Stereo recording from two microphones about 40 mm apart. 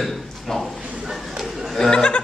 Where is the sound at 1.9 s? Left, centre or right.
Left.